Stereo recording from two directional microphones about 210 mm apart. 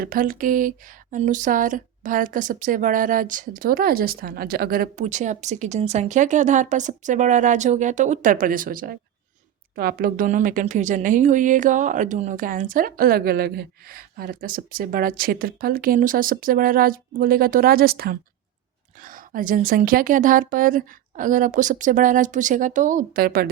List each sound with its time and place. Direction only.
0.0 s a woman's voice: 40° right (ahead or behind)